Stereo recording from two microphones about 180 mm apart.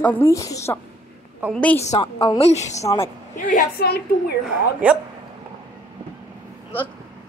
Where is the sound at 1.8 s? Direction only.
35° left (ahead or behind).